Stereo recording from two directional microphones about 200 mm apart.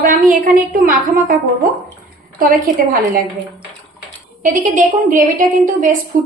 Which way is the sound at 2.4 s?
45° right (ahead or behind).